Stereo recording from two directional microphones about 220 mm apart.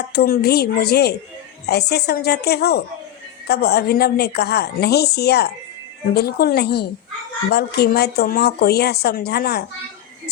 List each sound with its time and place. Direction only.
0.1 s speech: 45° left (ahead or behind)